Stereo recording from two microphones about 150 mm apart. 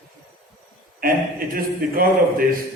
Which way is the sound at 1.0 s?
75° right (ahead or behind).